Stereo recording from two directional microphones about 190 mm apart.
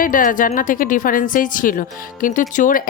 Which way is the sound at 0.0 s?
45° left (ahead or behind).